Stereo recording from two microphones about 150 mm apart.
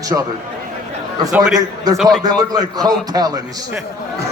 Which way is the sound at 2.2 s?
25° right (ahead or behind).